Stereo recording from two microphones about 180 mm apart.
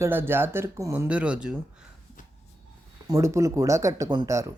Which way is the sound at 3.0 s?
15° right (ahead or behind).